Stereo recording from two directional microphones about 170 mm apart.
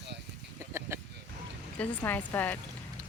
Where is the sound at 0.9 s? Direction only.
15° right (ahead or behind).